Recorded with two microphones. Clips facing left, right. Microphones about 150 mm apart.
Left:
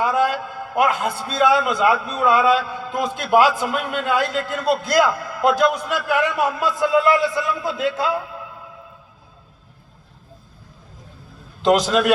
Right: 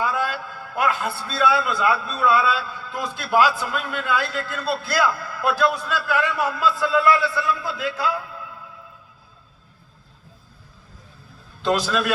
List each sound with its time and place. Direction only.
0.0 s a man's voice: 20° left (ahead or behind)
11.6 s a man's voice: 20° left (ahead or behind)